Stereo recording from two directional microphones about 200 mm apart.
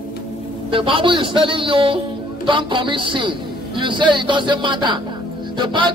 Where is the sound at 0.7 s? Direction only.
25° right (ahead or behind).